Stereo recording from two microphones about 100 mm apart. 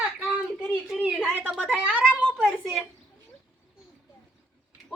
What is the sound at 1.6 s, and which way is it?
Speech, 15° right (ahead or behind).